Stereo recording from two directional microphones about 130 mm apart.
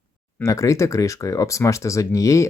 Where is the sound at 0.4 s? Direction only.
25° left (ahead or behind).